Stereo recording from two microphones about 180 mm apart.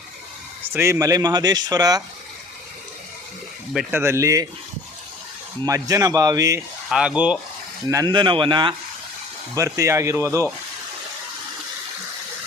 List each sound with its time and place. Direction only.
0.7 s speech: 15° right (ahead or behind)
3.9 s speech: 15° right (ahead or behind)
5.6 s speech: 20° right (ahead or behind)
6.9 s speech: 5° right (ahead or behind)
7.9 s speech: 20° right (ahead or behind)